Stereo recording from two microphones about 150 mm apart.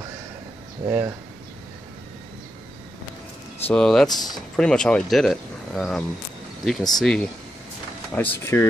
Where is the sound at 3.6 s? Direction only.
5° left (ahead or behind).